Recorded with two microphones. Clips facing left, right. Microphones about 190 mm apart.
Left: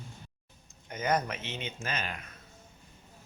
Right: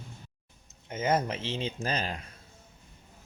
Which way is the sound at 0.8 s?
25° right (ahead or behind).